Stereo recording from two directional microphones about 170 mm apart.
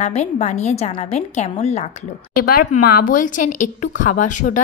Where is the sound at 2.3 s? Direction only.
60° left (ahead or behind).